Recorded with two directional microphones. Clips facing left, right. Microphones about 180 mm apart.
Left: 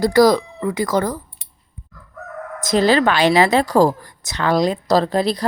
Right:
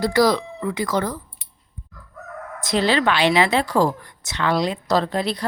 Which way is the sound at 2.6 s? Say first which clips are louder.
Left 5 dB; 40° left (ahead or behind).